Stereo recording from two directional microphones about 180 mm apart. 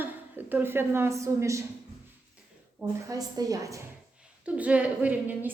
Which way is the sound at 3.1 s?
20° right (ahead or behind).